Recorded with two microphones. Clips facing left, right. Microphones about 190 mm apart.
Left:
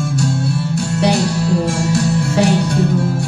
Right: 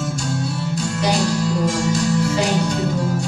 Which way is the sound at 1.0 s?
65° left (ahead or behind).